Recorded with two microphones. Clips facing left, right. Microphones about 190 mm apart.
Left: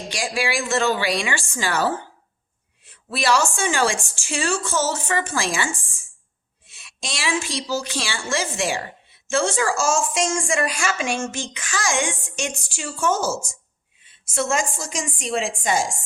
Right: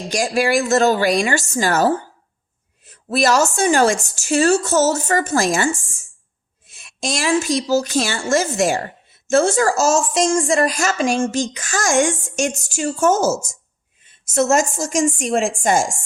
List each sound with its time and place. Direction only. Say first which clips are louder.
0.1 s speech: right 8 dB; 45° right (ahead or behind)